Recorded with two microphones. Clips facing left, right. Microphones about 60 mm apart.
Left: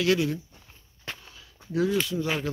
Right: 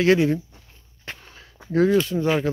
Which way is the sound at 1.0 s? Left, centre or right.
Right.